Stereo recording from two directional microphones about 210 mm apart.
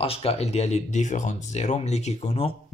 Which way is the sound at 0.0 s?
25° left (ahead or behind).